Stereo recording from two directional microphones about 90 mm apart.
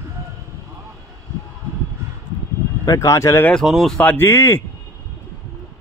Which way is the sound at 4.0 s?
15° left (ahead or behind).